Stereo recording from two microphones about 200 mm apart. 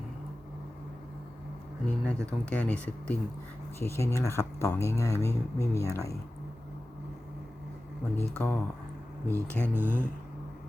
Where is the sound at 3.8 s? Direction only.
15° left (ahead or behind).